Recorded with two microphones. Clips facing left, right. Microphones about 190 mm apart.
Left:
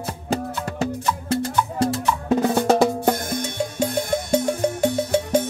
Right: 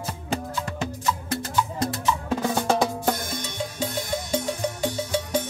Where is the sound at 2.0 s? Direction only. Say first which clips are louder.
Left 3 dB; 55° left (ahead or behind).